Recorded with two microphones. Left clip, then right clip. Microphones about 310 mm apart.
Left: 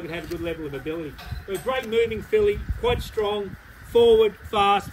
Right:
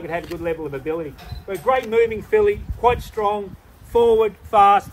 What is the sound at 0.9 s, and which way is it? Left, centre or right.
Speech, centre.